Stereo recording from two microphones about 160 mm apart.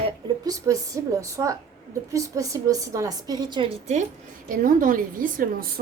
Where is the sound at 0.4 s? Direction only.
20° right (ahead or behind).